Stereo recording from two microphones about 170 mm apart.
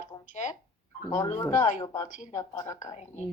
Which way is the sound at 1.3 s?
15° left (ahead or behind).